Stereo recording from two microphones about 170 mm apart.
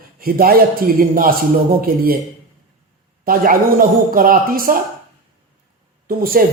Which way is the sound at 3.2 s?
60° right (ahead or behind).